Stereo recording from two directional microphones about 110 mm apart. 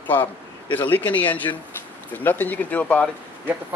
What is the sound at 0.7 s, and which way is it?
Speech, 15° left (ahead or behind).